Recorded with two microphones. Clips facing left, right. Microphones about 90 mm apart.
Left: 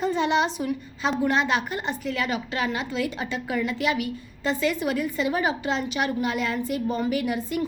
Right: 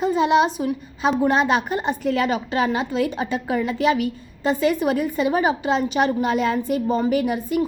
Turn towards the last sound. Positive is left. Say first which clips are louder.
# right 5 dB
turn(degrees=-25)  # may be behind; listen again after turning